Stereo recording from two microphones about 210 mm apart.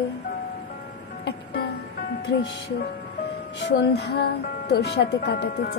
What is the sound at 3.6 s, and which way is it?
Speech, 55° left (ahead or behind).